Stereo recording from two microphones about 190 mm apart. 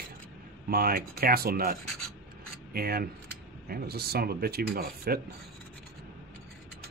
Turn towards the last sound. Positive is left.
turn(degrees=-50)  # may be behind; listen again after turning